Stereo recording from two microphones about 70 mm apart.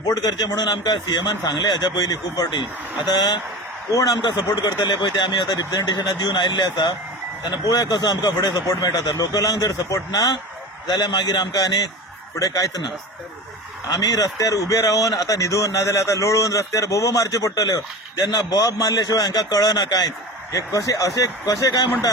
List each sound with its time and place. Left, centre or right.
0.1 s a man's voice: left
3.1 s speech: left
3.9 s speech: left
7.4 s a man's voice: left
10.8 s a man's voice: left
13.9 s a man's voice: left